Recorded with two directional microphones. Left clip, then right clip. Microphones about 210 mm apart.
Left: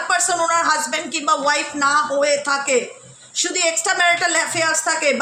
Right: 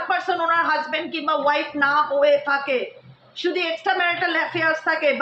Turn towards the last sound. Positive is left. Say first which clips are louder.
# left 1 dB
turn(degrees=60)  # may be behind; listen again after turning